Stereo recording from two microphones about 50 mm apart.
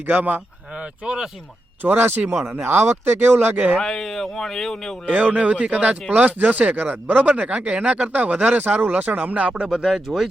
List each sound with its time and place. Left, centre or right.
0.0 s speech: right
1.0 s speech: centre
1.8 s speech: right
2.5 s speech: right
3.8 s speech: centre
5.0 s speech: right; by 10.0 s centre